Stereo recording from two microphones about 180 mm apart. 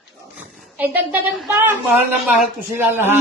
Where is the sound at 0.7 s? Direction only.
10° right (ahead or behind).